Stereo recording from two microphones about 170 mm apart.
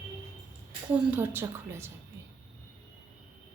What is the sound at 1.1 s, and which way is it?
Speech, 10° right (ahead or behind).